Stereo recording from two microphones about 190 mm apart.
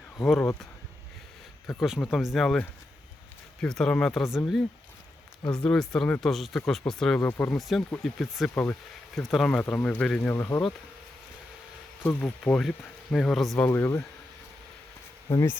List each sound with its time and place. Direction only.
0.2 s speech: 5° left (ahead or behind)
1.8 s speech: centre (ahead or behind)
12.0 s speech: 5° left (ahead or behind)
13.7 s speech: 15° left (ahead or behind)
15.3 s speech: 15° left (ahead or behind)